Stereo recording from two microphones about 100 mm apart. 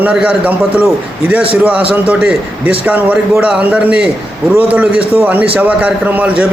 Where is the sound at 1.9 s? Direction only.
15° right (ahead or behind).